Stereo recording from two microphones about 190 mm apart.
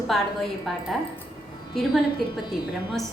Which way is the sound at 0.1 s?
Centre (ahead or behind).